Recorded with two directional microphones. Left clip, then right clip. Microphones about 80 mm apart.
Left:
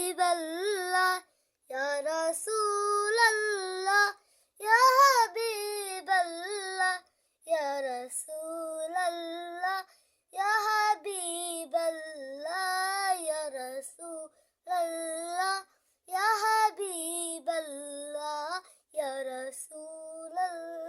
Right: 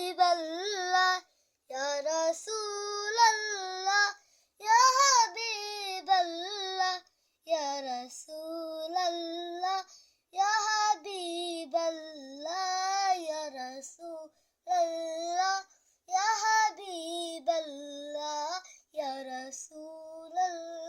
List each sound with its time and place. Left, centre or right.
0.0 s child singing: left
4.5 s child singing: left